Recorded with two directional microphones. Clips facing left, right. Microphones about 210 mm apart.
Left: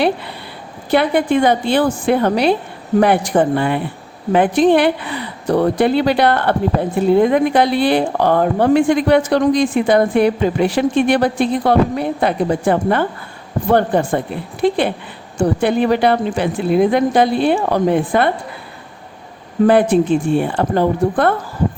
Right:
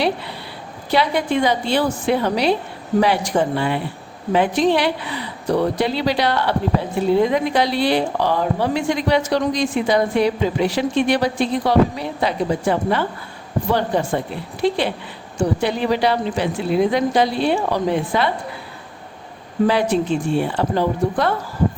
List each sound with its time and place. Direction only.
0.9 s a woman's voice: 55° left (ahead or behind)
19.6 s a woman's voice: 50° left (ahead or behind)